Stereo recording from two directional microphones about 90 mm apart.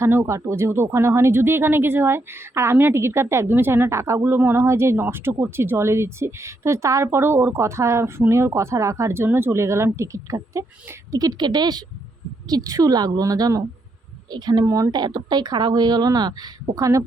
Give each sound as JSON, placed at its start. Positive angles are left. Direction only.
{"t": 0.0, "sound": "speech", "side_deg": -30}
{"t": 14.6, "sound": "speech", "side_deg": -40}
{"t": 16.7, "sound": "speech", "side_deg": -40}